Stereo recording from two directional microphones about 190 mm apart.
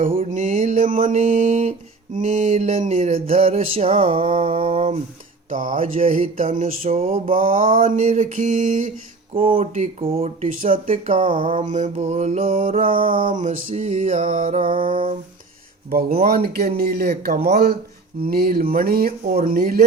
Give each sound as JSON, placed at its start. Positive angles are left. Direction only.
{"t": 0.2, "sound": "speech", "side_deg": -40}
{"t": 2.1, "sound": "a sound", "side_deg": -40}
{"t": 5.5, "sound": "speech", "side_deg": -45}
{"t": 9.6, "sound": "a sound", "side_deg": -35}
{"t": 11.3, "sound": "music", "side_deg": -25}
{"t": 11.7, "sound": "a sound", "side_deg": -35}
{"t": 12.9, "sound": "music", "side_deg": -25}
{"t": 13.1, "sound": "speech", "side_deg": -45}
{"t": 14.6, "sound": "music", "side_deg": -25}
{"t": 15.9, "sound": "speech", "side_deg": -50}